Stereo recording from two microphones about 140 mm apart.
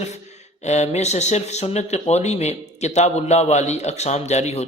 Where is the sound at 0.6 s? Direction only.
55° left (ahead or behind).